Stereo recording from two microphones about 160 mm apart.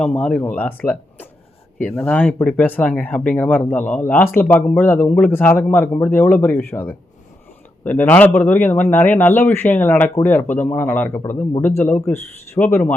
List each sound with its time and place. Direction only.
0.0 s speech: 5° left (ahead or behind)